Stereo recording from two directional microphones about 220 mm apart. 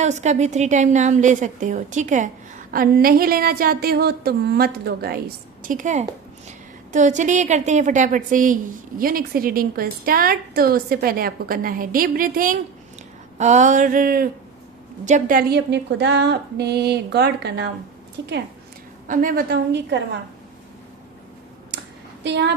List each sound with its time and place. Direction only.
0.0 s a woman's voice: 30° right (ahead or behind); by 17.7 s 50° right (ahead or behind)
19.0 s a woman's voice: 40° right (ahead or behind)
22.2 s a woman's voice: 50° right (ahead or behind)